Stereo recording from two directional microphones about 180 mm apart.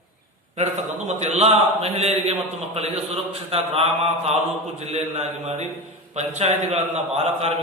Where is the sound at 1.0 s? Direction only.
40° right (ahead or behind).